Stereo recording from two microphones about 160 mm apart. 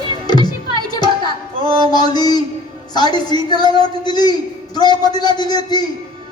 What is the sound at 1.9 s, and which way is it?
A man's voice, 25° left (ahead or behind).